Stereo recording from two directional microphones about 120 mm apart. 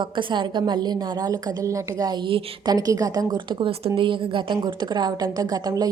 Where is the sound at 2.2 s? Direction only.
45° right (ahead or behind).